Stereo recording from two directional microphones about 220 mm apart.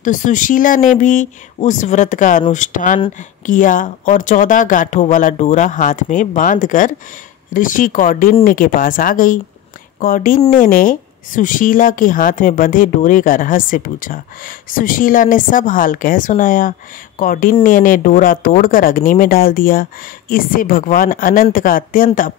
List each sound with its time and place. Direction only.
0.0 s a woman's voice: 35° left (ahead or behind)